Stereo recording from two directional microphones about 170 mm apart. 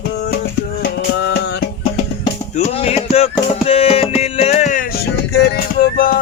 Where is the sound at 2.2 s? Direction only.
35° left (ahead or behind).